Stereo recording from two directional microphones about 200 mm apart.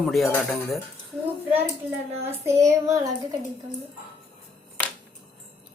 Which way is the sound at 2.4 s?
15° right (ahead or behind).